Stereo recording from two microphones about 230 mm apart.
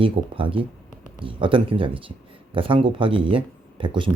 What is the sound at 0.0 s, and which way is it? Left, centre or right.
Speech, right.